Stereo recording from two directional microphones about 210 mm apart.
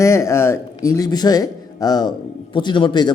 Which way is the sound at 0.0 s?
15° left (ahead or behind).